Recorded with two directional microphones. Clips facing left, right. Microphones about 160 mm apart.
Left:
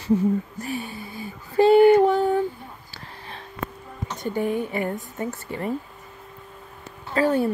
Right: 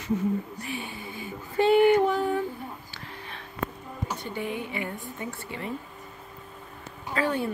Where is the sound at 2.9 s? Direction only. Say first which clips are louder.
Left 1 dB; 35° left (ahead or behind).